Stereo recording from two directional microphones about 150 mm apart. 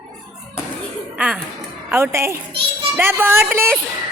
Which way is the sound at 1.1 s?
10° right (ahead or behind).